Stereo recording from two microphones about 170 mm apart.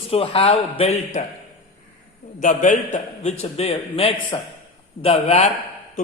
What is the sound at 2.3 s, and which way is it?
A man's voice, 50° left (ahead or behind).